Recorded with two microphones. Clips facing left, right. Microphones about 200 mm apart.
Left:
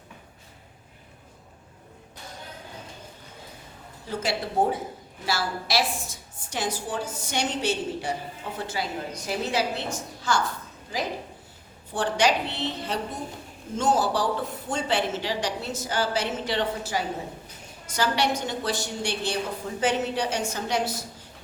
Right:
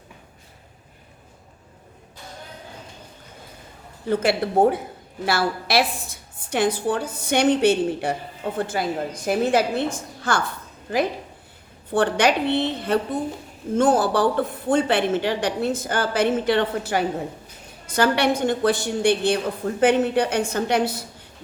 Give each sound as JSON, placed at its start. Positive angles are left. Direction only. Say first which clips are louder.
{"t": 4.1, "sound": "a woman's voice", "louder": "right 8 dB", "side_deg": -60}
{"t": 11.9, "sound": "a woman's voice", "louder": "right 5 dB", "side_deg": -60}